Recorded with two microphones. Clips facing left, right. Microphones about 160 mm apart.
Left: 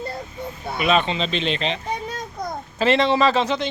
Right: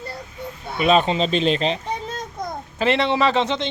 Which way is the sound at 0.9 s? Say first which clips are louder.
Right 3 dB; 40° right (ahead or behind).